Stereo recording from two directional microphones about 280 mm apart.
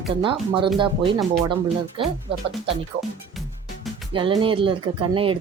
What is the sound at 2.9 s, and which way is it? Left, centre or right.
Speech, right.